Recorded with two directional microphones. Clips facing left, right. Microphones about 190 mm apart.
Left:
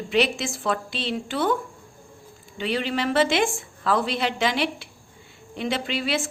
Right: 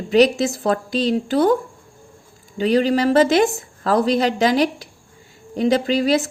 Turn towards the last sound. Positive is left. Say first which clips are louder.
# right 9 dB
turn(degrees=-40)  # may be behind; listen again after turning